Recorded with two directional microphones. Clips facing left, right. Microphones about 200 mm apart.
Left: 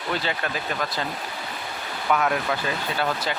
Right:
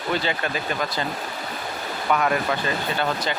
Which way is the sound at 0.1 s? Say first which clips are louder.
Right 2 dB; centre (ahead or behind).